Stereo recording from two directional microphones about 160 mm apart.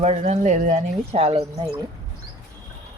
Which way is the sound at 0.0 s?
45° right (ahead or behind).